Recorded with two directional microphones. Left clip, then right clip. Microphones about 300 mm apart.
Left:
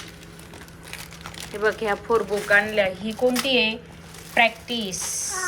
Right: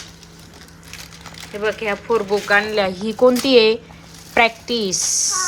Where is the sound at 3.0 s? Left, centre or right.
Right.